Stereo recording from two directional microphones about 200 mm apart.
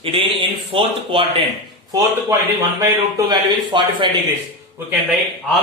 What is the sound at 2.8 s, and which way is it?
A man's voice, 20° right (ahead or behind).